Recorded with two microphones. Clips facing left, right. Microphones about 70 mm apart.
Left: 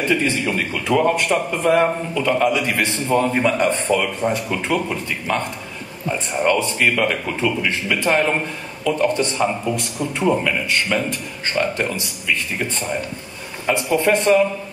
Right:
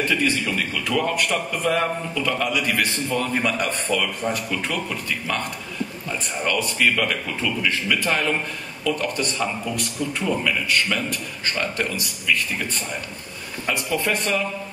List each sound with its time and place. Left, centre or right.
0.0 s a man's voice: left
13.7 s a man's voice: left